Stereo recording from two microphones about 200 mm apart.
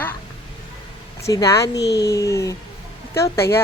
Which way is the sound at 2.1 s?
15° left (ahead or behind).